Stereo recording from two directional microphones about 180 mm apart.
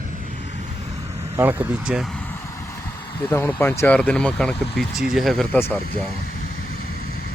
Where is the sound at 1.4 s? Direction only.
10° right (ahead or behind).